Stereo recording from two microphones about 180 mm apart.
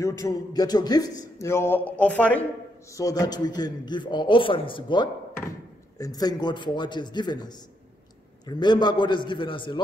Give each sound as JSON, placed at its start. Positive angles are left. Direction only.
{"t": 0.0, "sound": "a man's voice", "side_deg": 20}
{"t": 2.9, "sound": "a man's voice", "side_deg": 20}